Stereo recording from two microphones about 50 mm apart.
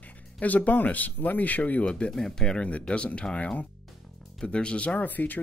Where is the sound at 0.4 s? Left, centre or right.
Left.